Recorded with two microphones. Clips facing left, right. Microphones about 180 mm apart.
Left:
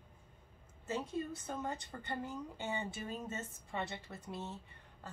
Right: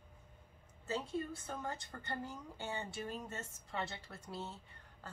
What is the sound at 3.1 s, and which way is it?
Speech, 5° left (ahead or behind).